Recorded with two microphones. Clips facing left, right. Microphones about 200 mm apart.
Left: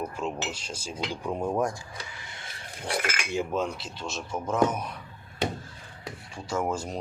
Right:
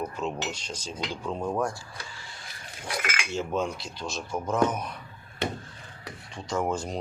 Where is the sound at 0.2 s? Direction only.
10° left (ahead or behind).